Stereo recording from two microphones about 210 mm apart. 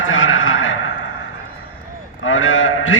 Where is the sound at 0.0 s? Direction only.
70° left (ahead or behind).